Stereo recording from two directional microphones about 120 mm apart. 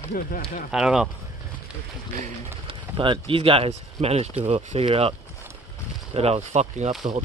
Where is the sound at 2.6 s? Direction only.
45° right (ahead or behind).